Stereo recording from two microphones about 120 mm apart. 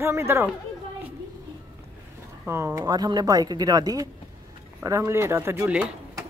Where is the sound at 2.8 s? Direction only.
35° right (ahead or behind).